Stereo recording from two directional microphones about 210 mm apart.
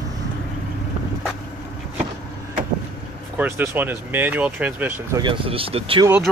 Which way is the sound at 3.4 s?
10° right (ahead or behind).